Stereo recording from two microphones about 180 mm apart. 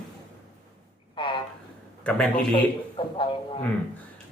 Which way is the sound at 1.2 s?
25° left (ahead or behind).